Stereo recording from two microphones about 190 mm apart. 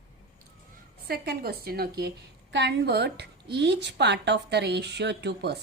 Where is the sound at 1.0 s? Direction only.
55° right (ahead or behind).